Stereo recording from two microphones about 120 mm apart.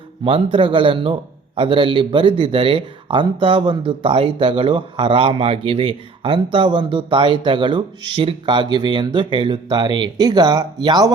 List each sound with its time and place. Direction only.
0.5 s speech: 45° right (ahead or behind)